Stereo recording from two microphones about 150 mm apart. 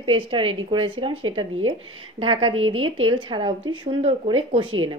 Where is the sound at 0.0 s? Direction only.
35° right (ahead or behind).